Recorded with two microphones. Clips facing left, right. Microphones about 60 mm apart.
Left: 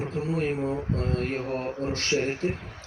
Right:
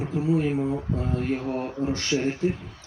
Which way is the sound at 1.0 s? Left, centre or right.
Left.